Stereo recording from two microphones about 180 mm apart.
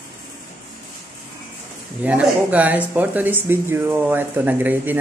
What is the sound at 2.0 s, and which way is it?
Speech, 10° right (ahead or behind).